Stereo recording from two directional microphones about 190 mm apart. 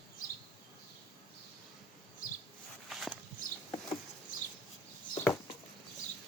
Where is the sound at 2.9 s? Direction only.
Centre (ahead or behind).